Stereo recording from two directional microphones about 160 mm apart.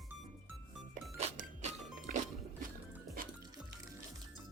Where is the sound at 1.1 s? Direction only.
45° right (ahead or behind).